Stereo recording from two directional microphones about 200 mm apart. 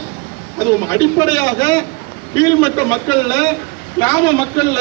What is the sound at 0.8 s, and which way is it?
A man's voice, 15° left (ahead or behind).